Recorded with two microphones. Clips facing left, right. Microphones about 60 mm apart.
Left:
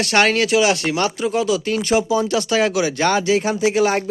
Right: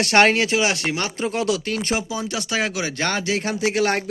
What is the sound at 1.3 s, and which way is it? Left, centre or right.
Speech, right.